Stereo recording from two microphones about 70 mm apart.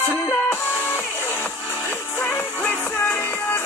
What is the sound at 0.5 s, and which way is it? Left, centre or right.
Music, left.